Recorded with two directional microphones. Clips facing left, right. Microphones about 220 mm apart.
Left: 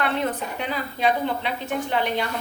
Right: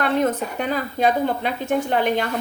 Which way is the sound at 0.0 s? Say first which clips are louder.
Right 5 dB; 45° right (ahead or behind).